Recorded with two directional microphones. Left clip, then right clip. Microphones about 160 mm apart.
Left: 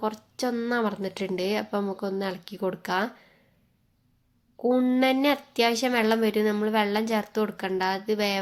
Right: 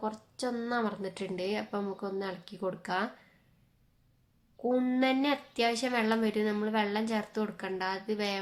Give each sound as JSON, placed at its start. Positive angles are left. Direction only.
{"t": 0.0, "sound": "speech", "side_deg": 35}
{"t": 4.6, "sound": "speech", "side_deg": 35}